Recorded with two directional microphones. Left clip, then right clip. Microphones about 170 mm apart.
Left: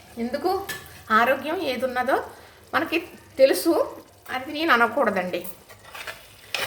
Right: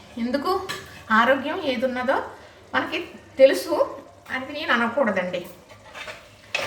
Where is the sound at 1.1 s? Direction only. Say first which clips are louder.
Right 1 dB; 20° left (ahead or behind).